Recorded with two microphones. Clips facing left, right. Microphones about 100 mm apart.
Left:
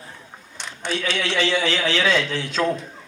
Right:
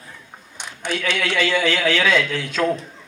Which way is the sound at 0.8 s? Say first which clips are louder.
Right 1 dB; 50° right (ahead or behind).